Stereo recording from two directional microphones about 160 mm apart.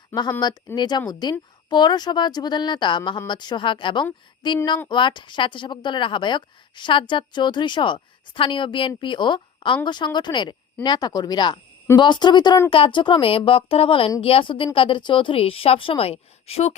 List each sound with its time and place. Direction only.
0.1 s a woman's voice: 20° left (ahead or behind); by 16.7 s 40° left (ahead or behind)